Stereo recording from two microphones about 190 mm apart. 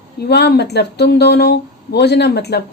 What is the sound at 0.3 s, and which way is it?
Speech, 60° left (ahead or behind).